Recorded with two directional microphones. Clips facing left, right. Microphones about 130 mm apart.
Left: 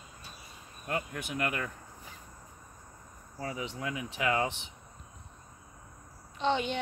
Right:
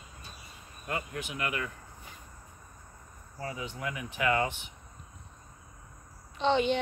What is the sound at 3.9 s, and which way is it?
Speech, 25° left (ahead or behind).